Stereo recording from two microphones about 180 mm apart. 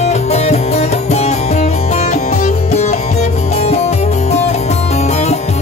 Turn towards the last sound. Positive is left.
turn(degrees=40)  # may be behind; listen again after turning